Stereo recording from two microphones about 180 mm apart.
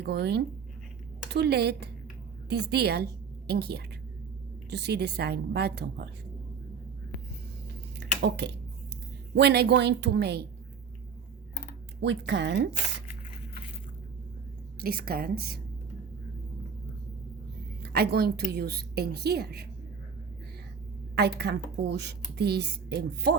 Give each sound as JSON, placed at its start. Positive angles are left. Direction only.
{"t": 0.0, "sound": "a woman's voice", "side_deg": -65}
{"t": 7.9, "sound": "a sound", "side_deg": -70}
{"t": 9.3, "sound": "a woman's voice", "side_deg": -65}
{"t": 11.9, "sound": "a woman's voice", "side_deg": -75}
{"t": 14.8, "sound": "a woman's voice", "side_deg": -55}
{"t": 17.8, "sound": "a woman's voice", "side_deg": -60}
{"t": 21.2, "sound": "a woman's voice", "side_deg": -65}